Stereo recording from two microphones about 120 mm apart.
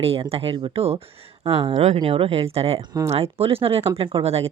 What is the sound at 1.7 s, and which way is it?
Speech, 65° right (ahead or behind).